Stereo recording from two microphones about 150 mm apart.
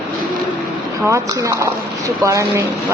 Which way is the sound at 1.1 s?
20° right (ahead or behind).